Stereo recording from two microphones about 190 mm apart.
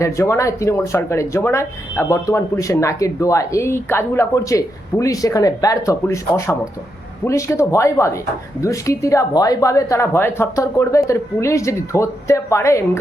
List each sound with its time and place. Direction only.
0.0 s speech: 15° left (ahead or behind)